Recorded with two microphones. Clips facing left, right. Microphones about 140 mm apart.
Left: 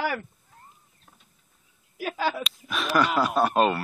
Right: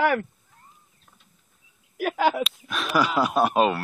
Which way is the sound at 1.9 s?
65° right (ahead or behind).